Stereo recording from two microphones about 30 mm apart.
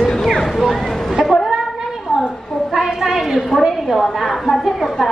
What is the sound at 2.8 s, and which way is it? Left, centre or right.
A woman's voice, centre.